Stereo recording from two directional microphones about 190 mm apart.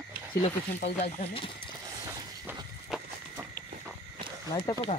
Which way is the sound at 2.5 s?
10° right (ahead or behind).